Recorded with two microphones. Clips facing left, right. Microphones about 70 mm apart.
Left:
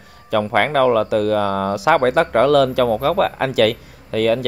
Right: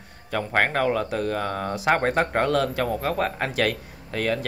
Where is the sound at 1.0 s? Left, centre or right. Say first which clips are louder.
Left 9 dB; left.